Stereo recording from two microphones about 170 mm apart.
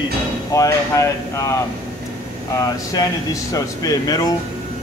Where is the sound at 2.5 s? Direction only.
20° left (ahead or behind).